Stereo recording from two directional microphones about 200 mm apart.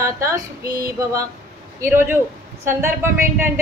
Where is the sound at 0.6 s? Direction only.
45° right (ahead or behind).